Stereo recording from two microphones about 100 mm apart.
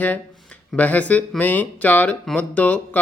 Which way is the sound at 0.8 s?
15° left (ahead or behind).